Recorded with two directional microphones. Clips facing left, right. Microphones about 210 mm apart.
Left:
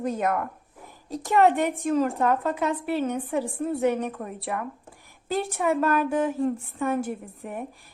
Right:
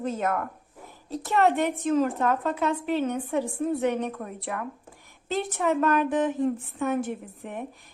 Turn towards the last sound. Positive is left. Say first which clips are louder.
# left 1 dB
turn(degrees=0)  # may be behind; listen again after turning